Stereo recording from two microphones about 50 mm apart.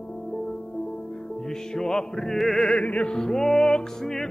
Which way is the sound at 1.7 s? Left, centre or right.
Centre.